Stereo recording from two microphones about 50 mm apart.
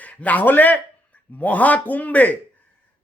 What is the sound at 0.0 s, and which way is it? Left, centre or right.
A man's voice, left.